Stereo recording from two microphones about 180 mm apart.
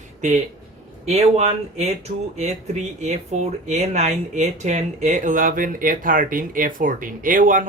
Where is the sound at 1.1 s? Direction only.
35° right (ahead or behind).